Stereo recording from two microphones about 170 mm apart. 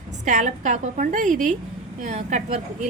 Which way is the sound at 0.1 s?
45° right (ahead or behind).